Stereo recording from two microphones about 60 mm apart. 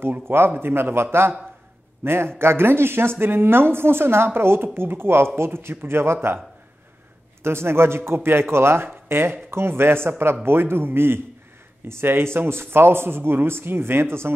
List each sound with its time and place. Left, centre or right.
0.5 s speech: right
2.0 s speech: right
7.4 s speech: right